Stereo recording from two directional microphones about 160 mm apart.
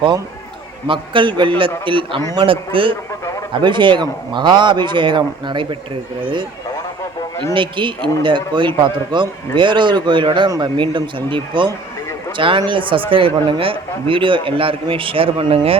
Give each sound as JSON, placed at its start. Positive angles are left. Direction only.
{"t": 0.9, "sound": "speech", "side_deg": -30}
{"t": 7.5, "sound": "speech", "side_deg": -30}